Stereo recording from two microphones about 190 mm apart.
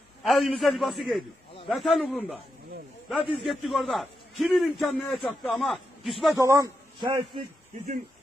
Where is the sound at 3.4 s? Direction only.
Centre (ahead or behind).